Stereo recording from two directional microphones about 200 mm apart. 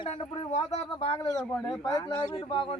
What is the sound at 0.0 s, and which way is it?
Speech, 25° left (ahead or behind).